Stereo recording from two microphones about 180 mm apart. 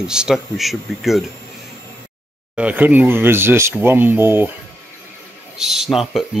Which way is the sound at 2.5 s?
10° right (ahead or behind).